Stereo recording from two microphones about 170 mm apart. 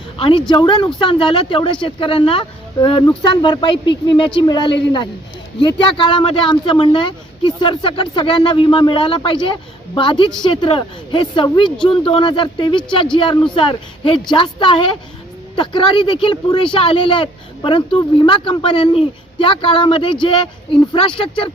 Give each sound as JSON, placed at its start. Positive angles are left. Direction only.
{"t": 0.2, "sound": "speech", "side_deg": 30}